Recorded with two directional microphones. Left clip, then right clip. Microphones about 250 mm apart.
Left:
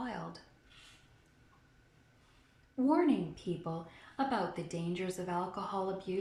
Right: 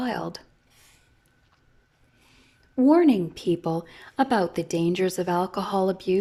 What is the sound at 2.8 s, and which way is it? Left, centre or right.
Speech, right.